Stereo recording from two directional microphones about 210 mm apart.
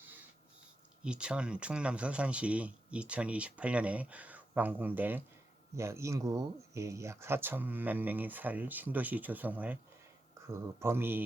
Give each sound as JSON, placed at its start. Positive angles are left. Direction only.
{"t": 1.0, "sound": "speech", "side_deg": -5}